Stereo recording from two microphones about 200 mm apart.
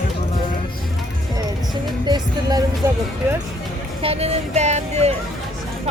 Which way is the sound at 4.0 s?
30° right (ahead or behind).